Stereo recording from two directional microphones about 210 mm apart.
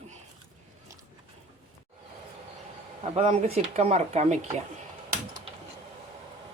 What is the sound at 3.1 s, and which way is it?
Speech, 30° right (ahead or behind).